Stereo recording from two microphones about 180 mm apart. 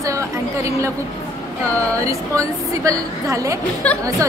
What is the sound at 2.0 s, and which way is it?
A woman's voice, 15° right (ahead or behind).